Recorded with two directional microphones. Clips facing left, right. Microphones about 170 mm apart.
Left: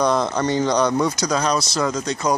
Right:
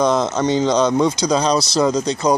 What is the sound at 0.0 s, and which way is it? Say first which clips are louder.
Speech: right 2 dB; 20° right (ahead or behind).